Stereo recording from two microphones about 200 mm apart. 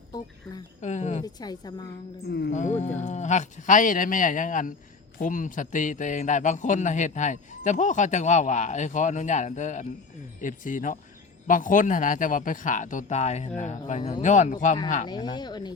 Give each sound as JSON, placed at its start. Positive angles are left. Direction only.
{"t": 0.8, "sound": "a man's voice", "side_deg": 35}
{"t": 1.2, "sound": "a woman's voice", "side_deg": 20}
{"t": 2.5, "sound": "a man's voice", "side_deg": 35}
{"t": 15.0, "sound": "a woman's voice", "side_deg": 20}